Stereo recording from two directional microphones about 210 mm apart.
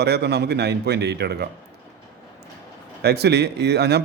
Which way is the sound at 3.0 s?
50° right (ahead or behind).